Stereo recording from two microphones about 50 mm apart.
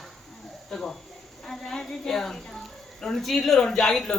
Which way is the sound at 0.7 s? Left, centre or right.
Centre.